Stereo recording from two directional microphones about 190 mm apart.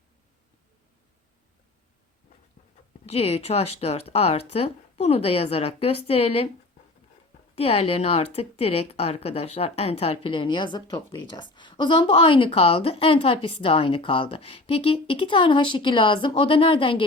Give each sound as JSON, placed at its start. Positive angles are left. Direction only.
{"t": 3.1, "sound": "speech", "side_deg": 30}
{"t": 7.5, "sound": "a woman's voice", "side_deg": 30}